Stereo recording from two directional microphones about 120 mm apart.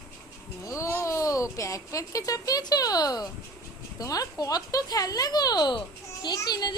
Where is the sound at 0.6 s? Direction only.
25° left (ahead or behind).